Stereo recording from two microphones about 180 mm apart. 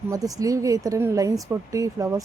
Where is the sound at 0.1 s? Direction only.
20° right (ahead or behind).